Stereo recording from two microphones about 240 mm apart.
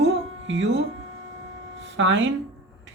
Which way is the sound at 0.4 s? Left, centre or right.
Right.